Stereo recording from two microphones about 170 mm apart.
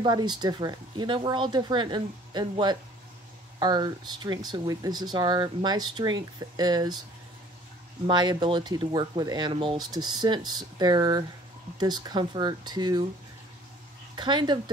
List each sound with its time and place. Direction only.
0.0 s speech: 25° right (ahead or behind)
8.1 s speech: 25° right (ahead or behind)
14.1 s speech: 25° right (ahead or behind)